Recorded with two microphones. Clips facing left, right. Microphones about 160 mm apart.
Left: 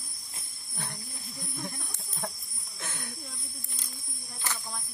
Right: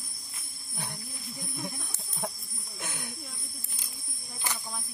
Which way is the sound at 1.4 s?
10° right (ahead or behind).